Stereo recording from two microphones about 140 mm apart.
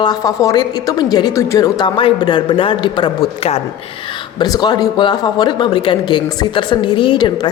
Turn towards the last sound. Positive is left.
turn(degrees=35)  # may be behind; listen again after turning